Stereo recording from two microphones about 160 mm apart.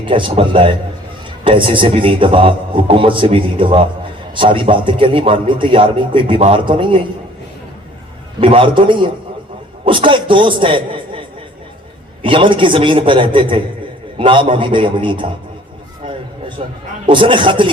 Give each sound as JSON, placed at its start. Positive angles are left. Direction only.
{"t": 0.0, "sound": "a man's voice", "side_deg": -30}
{"t": 8.4, "sound": "a man's voice", "side_deg": -35}
{"t": 12.2, "sound": "a man's voice", "side_deg": -30}
{"t": 16.6, "sound": "a man's voice", "side_deg": -40}